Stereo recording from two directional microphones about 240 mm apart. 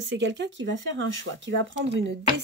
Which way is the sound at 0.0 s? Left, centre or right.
Right.